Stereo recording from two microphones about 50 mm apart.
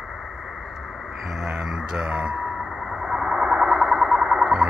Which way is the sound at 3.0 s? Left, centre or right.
Centre.